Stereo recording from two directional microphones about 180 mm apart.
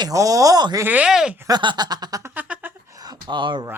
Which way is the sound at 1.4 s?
25° right (ahead or behind).